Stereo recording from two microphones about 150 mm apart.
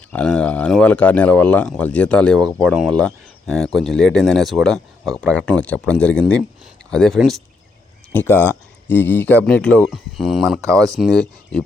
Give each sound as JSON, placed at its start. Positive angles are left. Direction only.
{"t": 0.1, "sound": "speech", "side_deg": 5}
{"t": 8.1, "sound": "speech", "side_deg": 15}
{"t": 10.6, "sound": "speech", "side_deg": -20}